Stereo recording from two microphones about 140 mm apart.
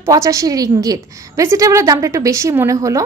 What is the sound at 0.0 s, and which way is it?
A woman's voice, 20° right (ahead or behind).